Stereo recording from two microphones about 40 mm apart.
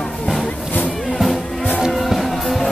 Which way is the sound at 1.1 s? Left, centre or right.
Centre.